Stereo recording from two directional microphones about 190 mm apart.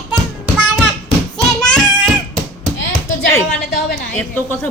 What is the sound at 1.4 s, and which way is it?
Child singing, 5° left (ahead or behind).